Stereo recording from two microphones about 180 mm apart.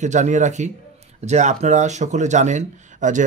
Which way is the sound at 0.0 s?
40° right (ahead or behind).